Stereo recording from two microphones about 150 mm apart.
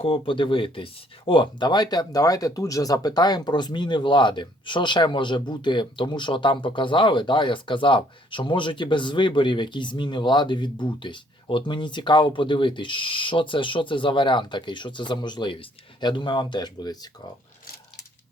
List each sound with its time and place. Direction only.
0.0 s speech: 35° left (ahead or behind)